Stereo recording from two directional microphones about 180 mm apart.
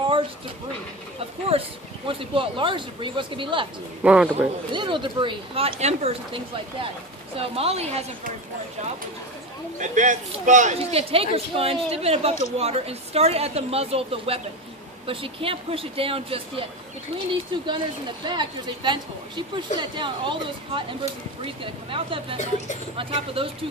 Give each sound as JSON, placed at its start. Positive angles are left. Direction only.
{"t": 1.5, "sound": "speech", "side_deg": -35}
{"t": 4.0, "sound": "a man's voice", "side_deg": -5}
{"t": 4.7, "sound": "speech", "side_deg": -25}
{"t": 9.8, "sound": "speech", "side_deg": -45}
{"t": 17.6, "sound": "speech", "side_deg": -25}